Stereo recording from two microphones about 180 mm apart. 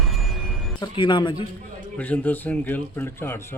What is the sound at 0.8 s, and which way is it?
Speech, 25° left (ahead or behind).